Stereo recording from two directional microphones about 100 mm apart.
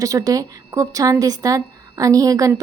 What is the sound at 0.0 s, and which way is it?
A woman's voice, 35° right (ahead or behind).